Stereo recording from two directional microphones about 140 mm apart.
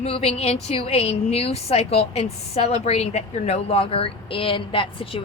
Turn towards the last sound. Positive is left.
turn(degrees=40)  # may be behind; listen again after turning